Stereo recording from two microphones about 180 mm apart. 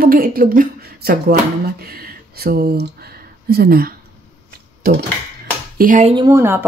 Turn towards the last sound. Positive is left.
turn(degrees=-15)  # may be behind; listen again after turning